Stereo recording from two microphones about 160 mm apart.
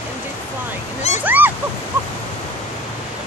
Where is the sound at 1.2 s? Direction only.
10° right (ahead or behind).